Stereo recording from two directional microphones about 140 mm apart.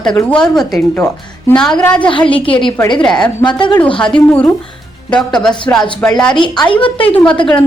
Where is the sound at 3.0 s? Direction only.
5° left (ahead or behind).